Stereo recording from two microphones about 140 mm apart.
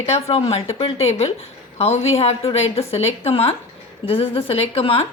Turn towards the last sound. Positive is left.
turn(degrees=40)  # may be behind; listen again after turning